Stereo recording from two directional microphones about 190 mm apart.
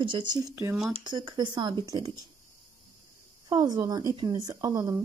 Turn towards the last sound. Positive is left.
turn(degrees=-20)  # may be behind; listen again after turning